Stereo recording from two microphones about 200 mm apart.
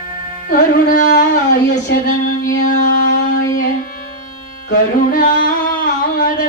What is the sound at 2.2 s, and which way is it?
Music, 45° left (ahead or behind).